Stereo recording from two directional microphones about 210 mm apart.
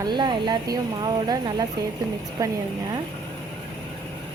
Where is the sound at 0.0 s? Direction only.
20° right (ahead or behind).